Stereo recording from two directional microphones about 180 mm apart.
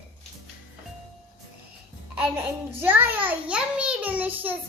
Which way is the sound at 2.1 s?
10° right (ahead or behind).